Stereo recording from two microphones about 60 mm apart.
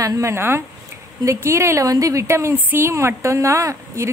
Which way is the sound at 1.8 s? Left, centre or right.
Right.